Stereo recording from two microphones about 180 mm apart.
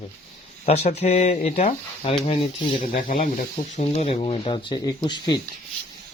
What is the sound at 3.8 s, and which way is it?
Speech, 35° left (ahead or behind).